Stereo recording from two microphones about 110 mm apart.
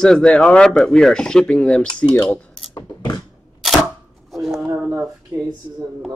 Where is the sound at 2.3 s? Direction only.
10° left (ahead or behind).